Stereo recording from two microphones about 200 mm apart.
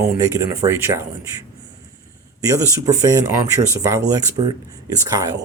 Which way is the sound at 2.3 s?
15° right (ahead or behind).